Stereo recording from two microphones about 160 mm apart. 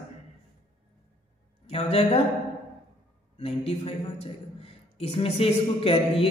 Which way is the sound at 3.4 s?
40° left (ahead or behind).